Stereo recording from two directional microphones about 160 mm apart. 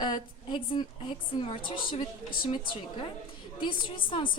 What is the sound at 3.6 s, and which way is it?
Speech, 30° left (ahead or behind).